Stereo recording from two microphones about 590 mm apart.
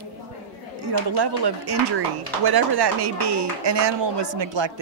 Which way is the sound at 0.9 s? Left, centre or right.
Right.